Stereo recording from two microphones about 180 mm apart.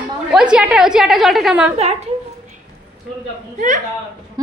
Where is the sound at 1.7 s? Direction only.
35° right (ahead or behind).